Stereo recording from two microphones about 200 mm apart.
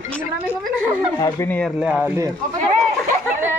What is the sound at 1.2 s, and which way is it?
Speech, 15° left (ahead or behind).